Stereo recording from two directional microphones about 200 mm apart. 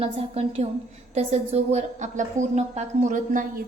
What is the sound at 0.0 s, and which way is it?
A woman's voice, 30° right (ahead or behind).